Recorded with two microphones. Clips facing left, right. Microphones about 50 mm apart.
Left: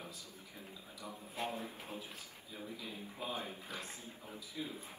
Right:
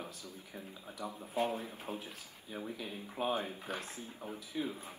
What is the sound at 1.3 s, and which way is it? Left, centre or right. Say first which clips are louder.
Speech: right 6 dB; right.